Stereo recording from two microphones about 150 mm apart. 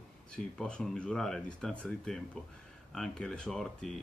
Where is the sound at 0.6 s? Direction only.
5° left (ahead or behind).